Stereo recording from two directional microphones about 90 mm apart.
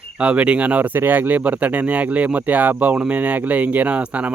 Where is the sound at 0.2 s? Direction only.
15° right (ahead or behind).